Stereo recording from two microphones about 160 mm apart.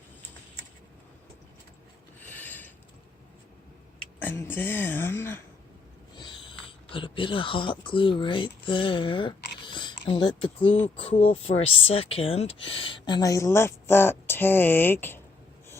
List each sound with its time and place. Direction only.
2.2 s pulleys: 10° left (ahead or behind)
4.2 s a woman's voice: 10° left (ahead or behind)
6.1 s speech: 30° left (ahead or behind); by 15.2 s 15° left (ahead or behind)